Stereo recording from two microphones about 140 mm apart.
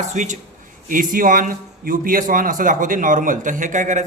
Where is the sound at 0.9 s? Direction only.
80° right.